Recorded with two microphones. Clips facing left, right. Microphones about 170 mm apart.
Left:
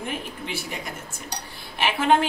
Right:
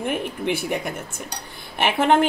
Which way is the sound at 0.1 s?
60° right (ahead or behind).